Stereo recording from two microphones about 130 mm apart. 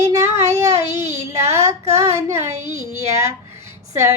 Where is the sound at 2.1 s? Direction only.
20° right (ahead or behind).